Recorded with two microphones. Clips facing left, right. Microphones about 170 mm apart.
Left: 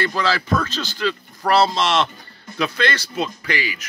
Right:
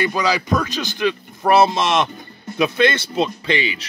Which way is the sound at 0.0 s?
15° right (ahead or behind).